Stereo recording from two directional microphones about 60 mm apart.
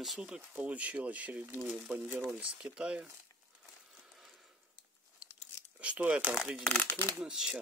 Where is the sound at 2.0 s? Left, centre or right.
Right.